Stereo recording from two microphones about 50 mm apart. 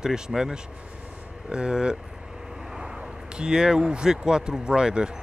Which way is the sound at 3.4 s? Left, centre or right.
Centre.